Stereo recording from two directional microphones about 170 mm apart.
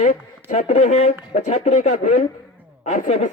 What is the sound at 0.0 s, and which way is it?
Speech, 50° left (ahead or behind).